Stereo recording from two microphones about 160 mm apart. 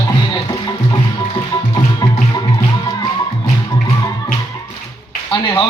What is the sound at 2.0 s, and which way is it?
Music, 25° left (ahead or behind).